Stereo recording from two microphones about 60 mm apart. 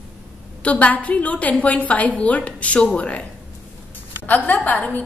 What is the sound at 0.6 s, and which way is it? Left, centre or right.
A woman's voice, left.